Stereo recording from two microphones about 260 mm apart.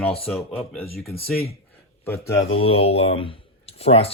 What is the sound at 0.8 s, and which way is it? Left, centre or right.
Speech, left.